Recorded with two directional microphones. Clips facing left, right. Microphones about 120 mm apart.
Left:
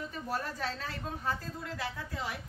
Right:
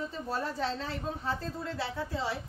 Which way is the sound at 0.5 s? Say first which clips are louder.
Right 4 dB; 25° right (ahead or behind).